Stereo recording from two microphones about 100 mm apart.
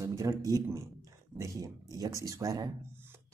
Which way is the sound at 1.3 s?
30° right (ahead or behind).